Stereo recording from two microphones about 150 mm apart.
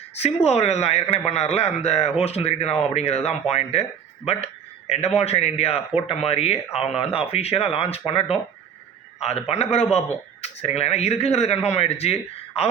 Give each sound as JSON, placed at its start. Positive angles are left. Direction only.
{"t": 0.4, "sound": "speech", "side_deg": 45}
{"t": 4.9, "sound": "speech", "side_deg": 45}